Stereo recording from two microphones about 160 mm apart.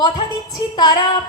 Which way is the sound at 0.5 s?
25° left (ahead or behind).